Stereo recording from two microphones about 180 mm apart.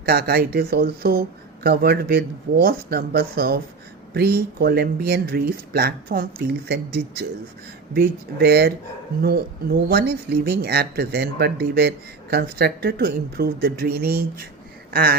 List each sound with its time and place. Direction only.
0.0 s speech: 60° right (ahead or behind)
9.9 s speech: 65° right (ahead or behind)
14.8 s a sound: 60° right (ahead or behind)